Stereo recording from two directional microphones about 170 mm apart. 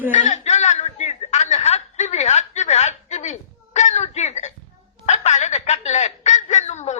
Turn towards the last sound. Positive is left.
turn(degrees=45)  # may be behind; listen again after turning